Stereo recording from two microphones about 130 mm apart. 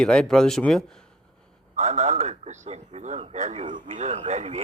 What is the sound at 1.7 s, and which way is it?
A man's voice, 65° right (ahead or behind).